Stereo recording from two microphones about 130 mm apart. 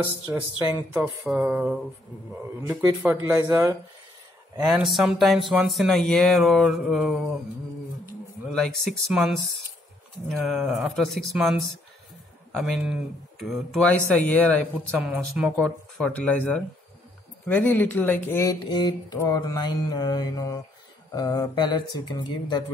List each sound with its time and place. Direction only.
0.3 s speech: 20° right (ahead or behind)
0.9 s speech: 5° right (ahead or behind)
2.6 s speech: 25° right (ahead or behind)
4.6 s speech: centre (ahead or behind)
8.5 s speech: 5° left (ahead or behind)
12.5 s speech: centre (ahead or behind)
13.8 s speech: 10° left (ahead or behind)
15.0 s speech: 10° right (ahead or behind)
15.5 s speech: 10° left (ahead or behind)
18.6 s speech: 35° left (ahead or behind)
19.1 s mantra: 30° left (ahead or behind)
21.1 s speech: 30° left (ahead or behind)